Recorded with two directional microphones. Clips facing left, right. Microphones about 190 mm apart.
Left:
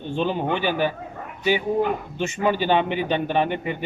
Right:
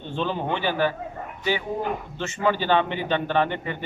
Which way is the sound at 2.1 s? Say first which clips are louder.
Left 1 dB; 15° left (ahead or behind).